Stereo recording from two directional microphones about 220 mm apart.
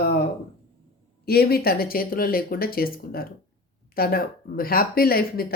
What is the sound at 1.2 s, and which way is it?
Speech, 45° left (ahead or behind).